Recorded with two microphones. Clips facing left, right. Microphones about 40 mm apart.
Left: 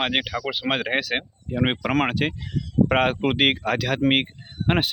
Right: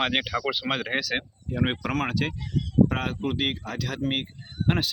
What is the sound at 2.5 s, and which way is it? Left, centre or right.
Speech, left.